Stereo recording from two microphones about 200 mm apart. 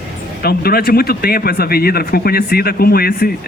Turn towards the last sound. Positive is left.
turn(degrees=45)  # may be behind; listen again after turning